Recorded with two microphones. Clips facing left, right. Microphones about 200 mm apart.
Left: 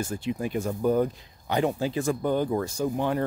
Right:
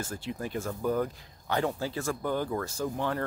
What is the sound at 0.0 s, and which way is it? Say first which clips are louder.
Speech: left 6 dB; 15° left (ahead or behind).